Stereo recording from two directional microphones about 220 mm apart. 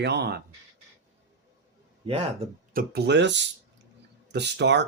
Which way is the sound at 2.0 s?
25° right (ahead or behind).